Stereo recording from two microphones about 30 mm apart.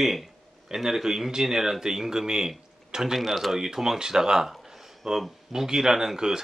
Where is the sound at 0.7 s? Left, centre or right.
Centre.